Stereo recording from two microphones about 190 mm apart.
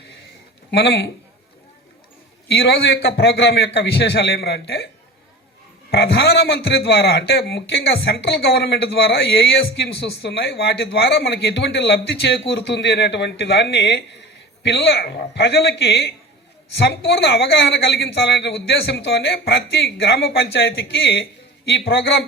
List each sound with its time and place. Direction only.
0.7 s a woman's voice: 60° left (ahead or behind)
2.5 s a woman's voice: 60° left (ahead or behind)
5.9 s a woman's voice: 60° left (ahead or behind)